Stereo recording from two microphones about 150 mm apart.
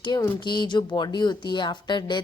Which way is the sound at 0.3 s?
30° left (ahead or behind).